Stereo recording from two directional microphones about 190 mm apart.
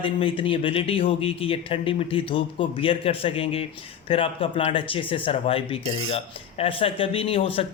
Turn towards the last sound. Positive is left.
turn(degrees=30)  # may be behind; listen again after turning